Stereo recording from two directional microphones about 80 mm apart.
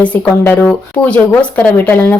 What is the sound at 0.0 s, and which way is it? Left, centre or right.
Speech, centre.